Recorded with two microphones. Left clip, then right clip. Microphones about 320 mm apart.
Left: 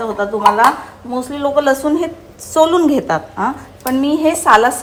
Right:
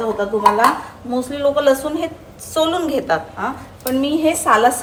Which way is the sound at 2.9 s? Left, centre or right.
Centre.